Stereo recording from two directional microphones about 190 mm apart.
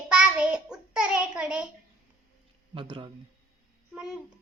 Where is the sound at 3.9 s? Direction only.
5° right (ahead or behind).